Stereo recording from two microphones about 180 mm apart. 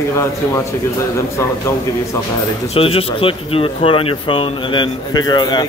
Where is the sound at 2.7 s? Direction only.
30° left (ahead or behind).